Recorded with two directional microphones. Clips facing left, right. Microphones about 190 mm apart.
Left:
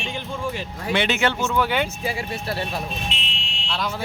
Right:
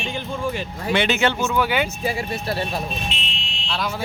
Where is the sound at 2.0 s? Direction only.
40° right (ahead or behind).